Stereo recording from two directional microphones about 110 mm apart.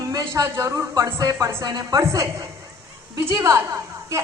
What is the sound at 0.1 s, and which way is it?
A woman's voice, 35° right (ahead or behind).